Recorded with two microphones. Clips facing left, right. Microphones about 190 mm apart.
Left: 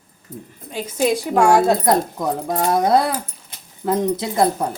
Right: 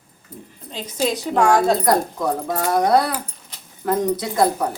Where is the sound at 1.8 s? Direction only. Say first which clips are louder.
Left 1 dB; 25° left (ahead or behind).